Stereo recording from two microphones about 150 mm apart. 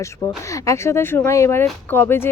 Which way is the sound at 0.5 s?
20° left (ahead or behind).